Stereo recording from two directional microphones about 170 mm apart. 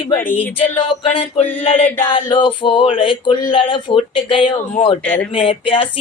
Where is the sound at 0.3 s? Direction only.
30° left (ahead or behind).